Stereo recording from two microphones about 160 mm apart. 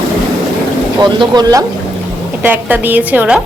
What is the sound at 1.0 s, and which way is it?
Speech, 30° right (ahead or behind).